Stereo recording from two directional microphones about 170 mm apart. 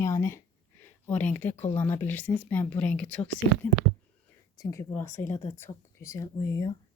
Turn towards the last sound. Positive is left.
turn(degrees=20)  # may be behind; listen again after turning